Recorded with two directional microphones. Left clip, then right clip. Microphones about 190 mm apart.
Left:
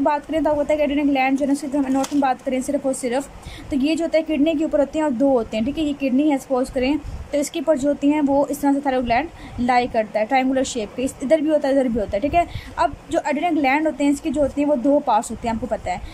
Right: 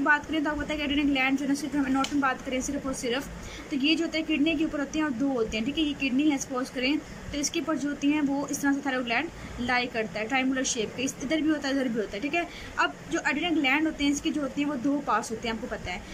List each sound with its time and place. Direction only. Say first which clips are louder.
0.0 s a woman's voice: left 5 dB; 20° left (ahead or behind)